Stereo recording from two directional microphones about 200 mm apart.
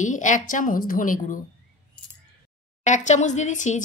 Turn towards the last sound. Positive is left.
turn(degrees=40)  # may be behind; listen again after turning